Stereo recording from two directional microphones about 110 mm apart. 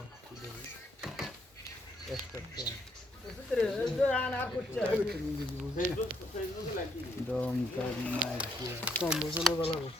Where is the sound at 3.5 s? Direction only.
5° left (ahead or behind).